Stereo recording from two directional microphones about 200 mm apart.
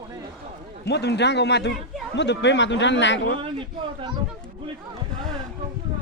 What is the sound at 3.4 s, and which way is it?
Speech, 25° right (ahead or behind).